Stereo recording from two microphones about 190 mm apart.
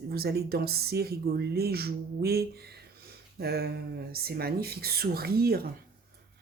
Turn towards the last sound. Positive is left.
turn(degrees=-55)  # may be behind; listen again after turning